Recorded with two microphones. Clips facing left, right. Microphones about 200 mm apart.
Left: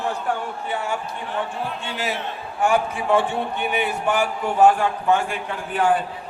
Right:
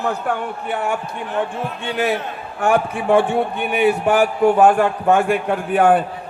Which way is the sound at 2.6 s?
55° right (ahead or behind).